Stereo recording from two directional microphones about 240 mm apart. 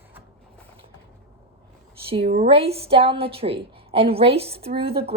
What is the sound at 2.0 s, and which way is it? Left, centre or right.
A woman's voice, right.